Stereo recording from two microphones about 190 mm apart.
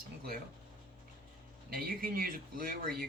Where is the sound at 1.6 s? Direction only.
50° right (ahead or behind).